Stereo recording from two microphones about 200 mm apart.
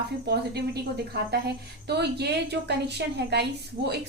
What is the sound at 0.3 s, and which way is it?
A woman's voice, 55° right (ahead or behind).